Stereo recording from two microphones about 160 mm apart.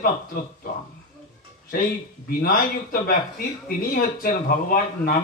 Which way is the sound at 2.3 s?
65° left (ahead or behind).